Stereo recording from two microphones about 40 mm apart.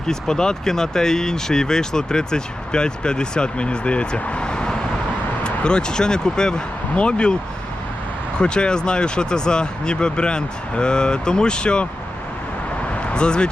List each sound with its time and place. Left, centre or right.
0.1 s speech: centre
8.4 s speech: left
12.9 s vehicle: left